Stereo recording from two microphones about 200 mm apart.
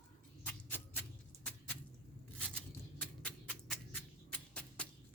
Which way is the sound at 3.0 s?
5° left (ahead or behind).